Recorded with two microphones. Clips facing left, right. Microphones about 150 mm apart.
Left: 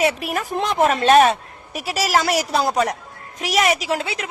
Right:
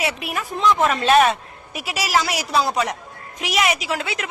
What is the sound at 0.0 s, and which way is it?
Speech, 40° left (ahead or behind).